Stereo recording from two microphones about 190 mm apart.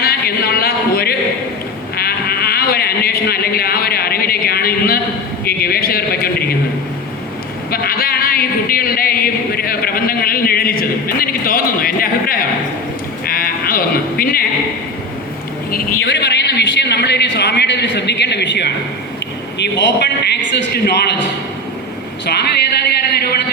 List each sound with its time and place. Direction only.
0.0 s a sound: 55° left (ahead or behind)
2.0 s sheep: 55° left (ahead or behind)
5.5 s speech: 55° left (ahead or behind)
7.7 s speech: 50° left (ahead or behind)
13.2 s sheep: 50° left (ahead or behind)
16.0 s a man's voice: 65° left (ahead or behind)
22.9 s a man's voice: 55° left (ahead or behind)